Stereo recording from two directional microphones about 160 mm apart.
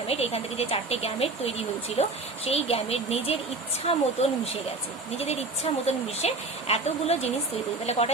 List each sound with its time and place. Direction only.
0.1 s speech: 40° left (ahead or behind)
5.1 s speech: 40° left (ahead or behind)